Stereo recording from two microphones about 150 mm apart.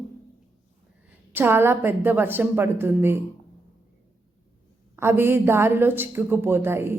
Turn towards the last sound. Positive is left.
turn(degrees=-15)  # may be behind; listen again after turning